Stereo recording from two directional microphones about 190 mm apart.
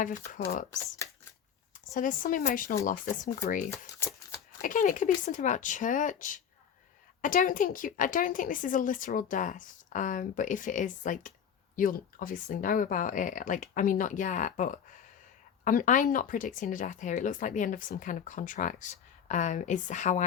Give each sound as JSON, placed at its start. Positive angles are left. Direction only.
{"t": 0.0, "sound": "a woman's voice", "side_deg": 45}
{"t": 1.7, "sound": "a woman's voice", "side_deg": 45}
{"t": 3.7, "sound": "a sound", "side_deg": 15}
{"t": 4.6, "sound": "a woman's voice", "side_deg": 45}